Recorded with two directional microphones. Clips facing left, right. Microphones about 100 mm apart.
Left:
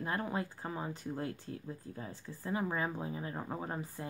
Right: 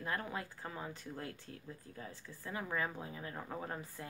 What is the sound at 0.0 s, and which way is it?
Speech, 25° left (ahead or behind).